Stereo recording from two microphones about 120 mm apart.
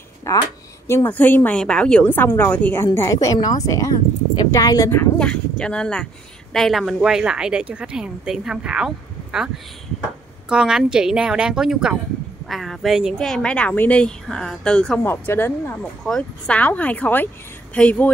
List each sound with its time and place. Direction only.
0.3 s a woman's voice: 25° left (ahead or behind)
5.2 s a woman's voice: 10° left (ahead or behind)
10.5 s a woman's voice: 5° right (ahead or behind)
15.0 s a woman's voice: 20° left (ahead or behind)
16.0 s a woman's voice: 5° left (ahead or behind)